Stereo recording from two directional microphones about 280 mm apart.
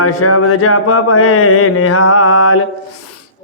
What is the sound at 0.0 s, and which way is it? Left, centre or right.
Speech, left.